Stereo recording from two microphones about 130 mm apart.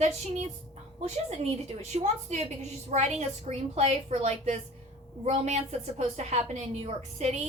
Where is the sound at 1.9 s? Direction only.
60° right (ahead or behind).